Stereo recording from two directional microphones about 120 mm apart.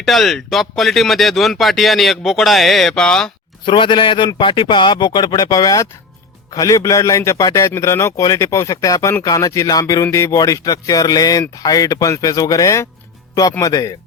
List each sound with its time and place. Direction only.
0.0 s speech: centre (ahead or behind)
3.7 s a man's voice: 40° left (ahead or behind)